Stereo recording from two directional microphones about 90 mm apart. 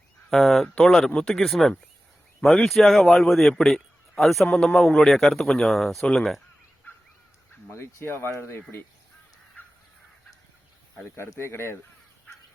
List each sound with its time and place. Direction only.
0.3 s a man's voice: centre (ahead or behind)
7.7 s speech: 30° left (ahead or behind)
11.0 s speech: 30° left (ahead or behind)